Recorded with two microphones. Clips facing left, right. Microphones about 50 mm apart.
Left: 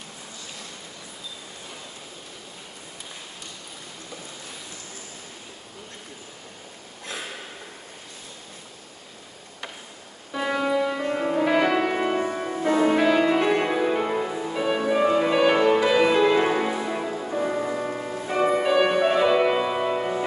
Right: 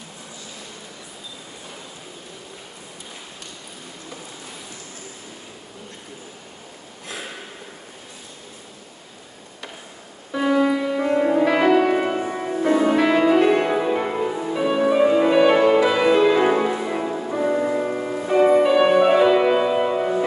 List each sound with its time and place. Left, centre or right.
10.3 s music: centre
11.0 s music: centre
15.5 s music: centre
15.9 s music: centre